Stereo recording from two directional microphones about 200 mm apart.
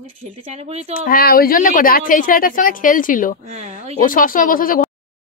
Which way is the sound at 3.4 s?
35° right (ahead or behind).